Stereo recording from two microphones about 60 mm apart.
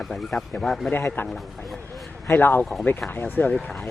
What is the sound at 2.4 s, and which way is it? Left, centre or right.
Speech, left.